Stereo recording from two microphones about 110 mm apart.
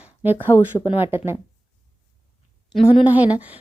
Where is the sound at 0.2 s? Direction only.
15° right (ahead or behind).